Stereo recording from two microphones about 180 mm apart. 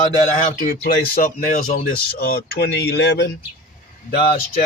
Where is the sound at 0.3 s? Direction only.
50° left (ahead or behind); by 3.3 s 70° left (ahead or behind).